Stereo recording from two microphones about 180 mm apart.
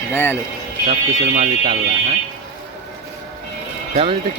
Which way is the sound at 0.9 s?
35° right (ahead or behind).